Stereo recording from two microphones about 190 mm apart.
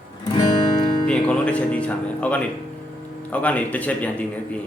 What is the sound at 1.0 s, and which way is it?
Speech, 5° left (ahead or behind).